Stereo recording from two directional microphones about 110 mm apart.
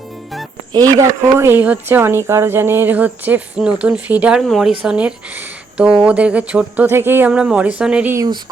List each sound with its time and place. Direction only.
0.7 s speech: 35° right (ahead or behind); by 8.1 s 10° right (ahead or behind)